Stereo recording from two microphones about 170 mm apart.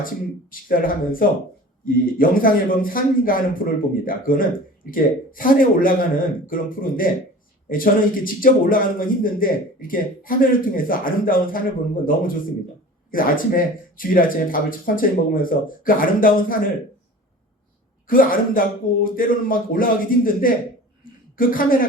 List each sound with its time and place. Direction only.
0.5 s a man's voice: 55° left (ahead or behind)
18.1 s a man's voice: 55° left (ahead or behind)